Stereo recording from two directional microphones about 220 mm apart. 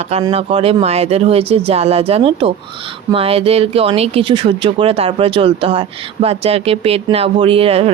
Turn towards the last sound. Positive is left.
turn(degrees=-25)  # may be behind; listen again after turning